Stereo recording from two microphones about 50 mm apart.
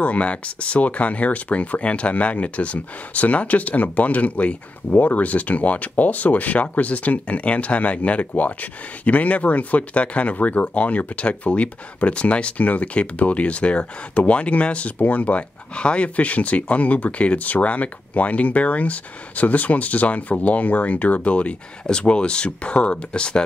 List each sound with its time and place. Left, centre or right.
0.0 s speech: left